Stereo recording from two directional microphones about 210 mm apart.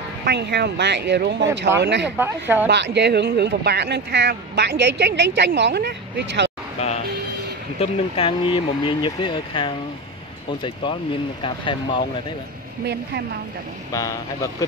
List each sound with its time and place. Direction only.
0.2 s speech: 55° right (ahead or behind)
2.1 s speech: 10° right (ahead or behind)
2.7 s speech: 55° right (ahead or behind)
7.8 s speech: 25° left (ahead or behind)
13.9 s speech: 15° left (ahead or behind)